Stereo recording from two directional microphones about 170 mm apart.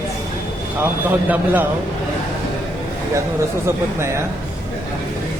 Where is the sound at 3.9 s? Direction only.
15° right (ahead or behind).